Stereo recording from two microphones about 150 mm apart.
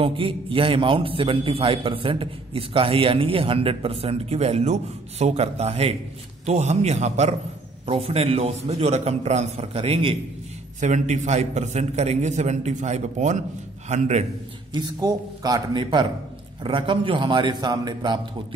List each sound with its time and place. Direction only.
0.0 s a man's voice: 35° right (ahead or behind)
10.8 s a man's voice: 50° right (ahead or behind)
14.7 s a man's voice: 25° right (ahead or behind)